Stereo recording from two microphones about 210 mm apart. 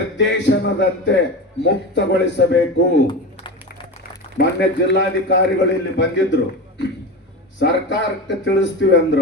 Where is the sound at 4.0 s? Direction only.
50° left (ahead or behind).